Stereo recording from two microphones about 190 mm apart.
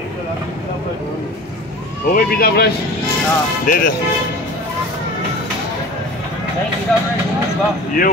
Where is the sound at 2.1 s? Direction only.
50° left (ahead or behind).